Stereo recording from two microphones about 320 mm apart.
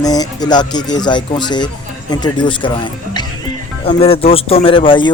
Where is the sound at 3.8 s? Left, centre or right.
Centre.